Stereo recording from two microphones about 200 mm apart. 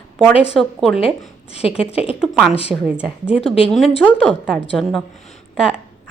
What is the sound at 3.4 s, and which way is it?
Speech, 30° left (ahead or behind).